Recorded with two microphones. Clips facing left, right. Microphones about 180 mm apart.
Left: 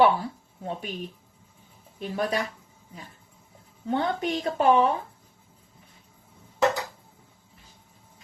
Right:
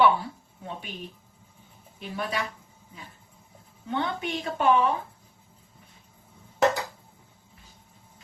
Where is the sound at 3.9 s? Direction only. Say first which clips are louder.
Left 3 dB; 40° left (ahead or behind).